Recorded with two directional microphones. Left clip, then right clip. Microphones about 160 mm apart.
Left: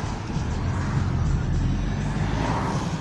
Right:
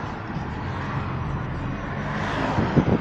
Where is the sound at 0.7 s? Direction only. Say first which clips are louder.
Right 1 dB; 40° right (ahead or behind).